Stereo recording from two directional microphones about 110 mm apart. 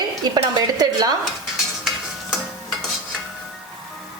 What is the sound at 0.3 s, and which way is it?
Speech, 40° right (ahead or behind).